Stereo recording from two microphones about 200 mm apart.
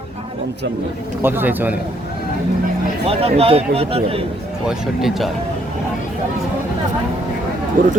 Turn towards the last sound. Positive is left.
turn(degrees=-45)  # may be behind; listen again after turning